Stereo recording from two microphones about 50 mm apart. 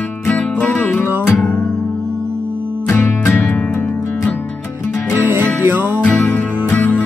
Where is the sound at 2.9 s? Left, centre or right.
Left.